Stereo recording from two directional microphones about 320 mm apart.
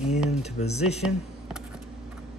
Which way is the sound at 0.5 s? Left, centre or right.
Centre.